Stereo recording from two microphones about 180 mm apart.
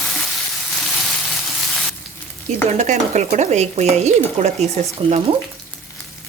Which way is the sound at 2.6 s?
40° right (ahead or behind).